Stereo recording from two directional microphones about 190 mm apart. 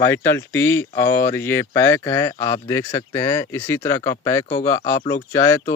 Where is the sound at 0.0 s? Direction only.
15° left (ahead or behind).